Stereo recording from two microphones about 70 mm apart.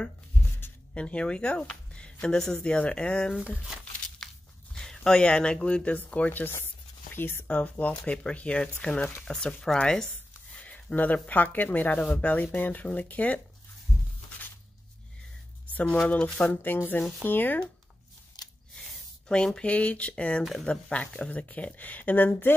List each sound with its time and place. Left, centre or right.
0.9 s speech: centre
4.7 s speech: centre; by 6.5 s left
6.5 s a sound: left
7.4 s speech: left
10.5 s a sound: centre
11.2 s speech: left
15.7 s speech: left
16.4 s speech: left
18.4 s a sound: left
18.8 s speech: centre; by 22.5 s left